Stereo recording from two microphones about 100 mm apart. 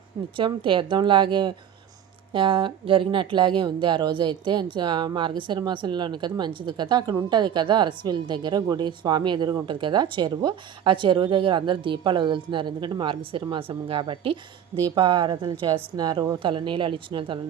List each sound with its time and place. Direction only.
0.3 s speech: 60° right (ahead or behind)
14.9 s speech: 45° right (ahead or behind)